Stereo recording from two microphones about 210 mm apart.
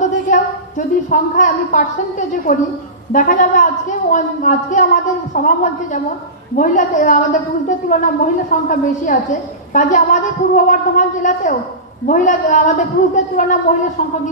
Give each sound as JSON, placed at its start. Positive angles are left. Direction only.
{"t": 0.0, "sound": "a woman's voice", "side_deg": 40}